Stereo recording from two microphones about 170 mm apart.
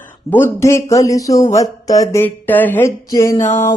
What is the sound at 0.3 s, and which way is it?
Mantra, 15° left (ahead or behind).